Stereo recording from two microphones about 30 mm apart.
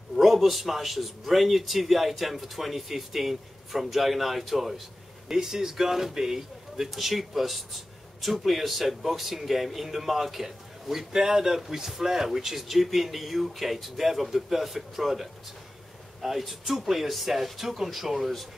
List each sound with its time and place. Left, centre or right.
0.1 s a man's voice: centre
6.9 s a man's voice: centre